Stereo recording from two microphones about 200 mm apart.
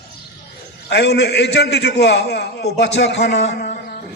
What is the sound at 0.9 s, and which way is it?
A man's voice, 55° left (ahead or behind).